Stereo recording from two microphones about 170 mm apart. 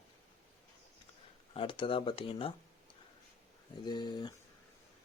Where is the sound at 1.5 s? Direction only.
30° left (ahead or behind).